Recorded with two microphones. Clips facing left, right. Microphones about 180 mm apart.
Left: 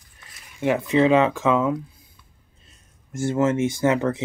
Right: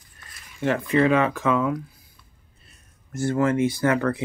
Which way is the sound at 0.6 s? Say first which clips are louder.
Left 2 dB; 15° left (ahead or behind).